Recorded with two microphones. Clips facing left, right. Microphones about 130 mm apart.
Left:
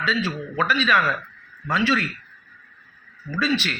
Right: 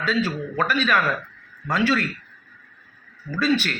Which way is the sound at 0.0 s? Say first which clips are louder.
Right 2 dB; 45° right (ahead or behind).